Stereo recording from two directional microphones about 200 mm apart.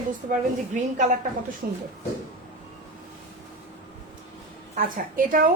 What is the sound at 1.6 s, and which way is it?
Speech, 50° right (ahead or behind).